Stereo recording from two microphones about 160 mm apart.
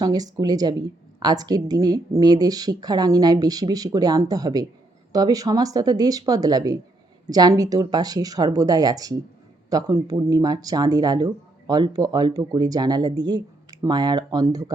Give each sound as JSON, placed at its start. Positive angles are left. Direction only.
{"t": 0.0, "sound": "speech", "side_deg": -25}